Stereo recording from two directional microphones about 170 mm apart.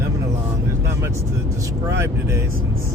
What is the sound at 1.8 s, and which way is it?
Speech, 15° right (ahead or behind).